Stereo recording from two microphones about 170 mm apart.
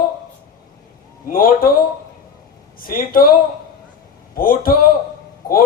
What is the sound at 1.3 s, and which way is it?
Speech, 55° left (ahead or behind).